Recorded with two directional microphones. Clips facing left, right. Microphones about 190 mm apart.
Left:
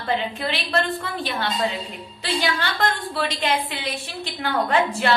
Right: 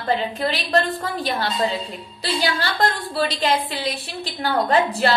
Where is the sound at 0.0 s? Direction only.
40° right (ahead or behind).